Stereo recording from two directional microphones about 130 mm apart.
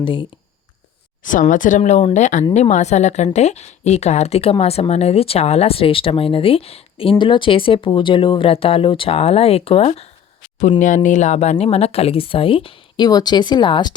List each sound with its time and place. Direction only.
0.0 s speech: 40° left (ahead or behind)
1.2 s a woman's voice: 85° left; by 10.1 s 50° left (ahead or behind)
10.6 s speech: 75° left (ahead or behind); by 13.1 s 45° left (ahead or behind)
13.1 s speech: 30° left (ahead or behind)